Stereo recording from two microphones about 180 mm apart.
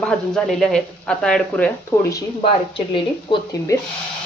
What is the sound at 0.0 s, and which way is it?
Speech, 5° left (ahead or behind).